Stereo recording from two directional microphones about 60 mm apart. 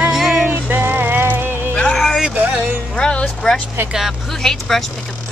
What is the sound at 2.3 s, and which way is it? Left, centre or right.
Speech, right.